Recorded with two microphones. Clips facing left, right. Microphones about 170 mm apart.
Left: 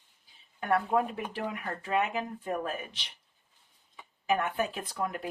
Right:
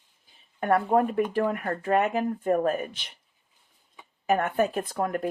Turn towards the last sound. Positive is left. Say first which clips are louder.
# right 6 dB
turn(degrees=-50)  # may be behind; listen again after turning